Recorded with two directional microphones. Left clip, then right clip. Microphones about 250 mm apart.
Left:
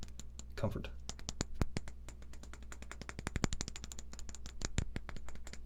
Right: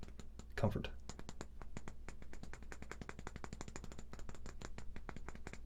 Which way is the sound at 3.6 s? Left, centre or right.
Left.